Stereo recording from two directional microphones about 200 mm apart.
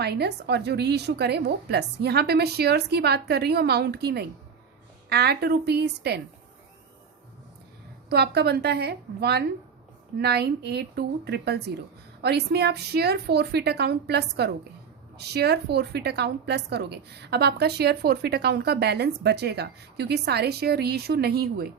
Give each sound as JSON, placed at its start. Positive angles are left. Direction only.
{"t": 0.0, "sound": "a woman's voice", "side_deg": -55}
{"t": 8.1, "sound": "a woman's voice", "side_deg": -55}